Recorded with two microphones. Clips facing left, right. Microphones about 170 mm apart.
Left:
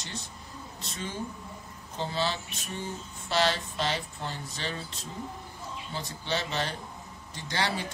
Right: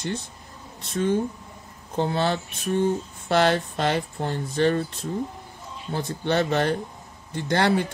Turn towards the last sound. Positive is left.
turn(degrees=-55)  # may be behind; listen again after turning